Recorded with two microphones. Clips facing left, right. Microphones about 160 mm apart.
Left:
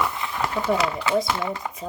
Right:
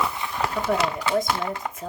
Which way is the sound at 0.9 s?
50° right (ahead or behind).